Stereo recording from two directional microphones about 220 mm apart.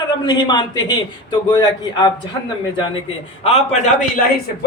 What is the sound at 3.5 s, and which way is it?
Speech, 30° left (ahead or behind).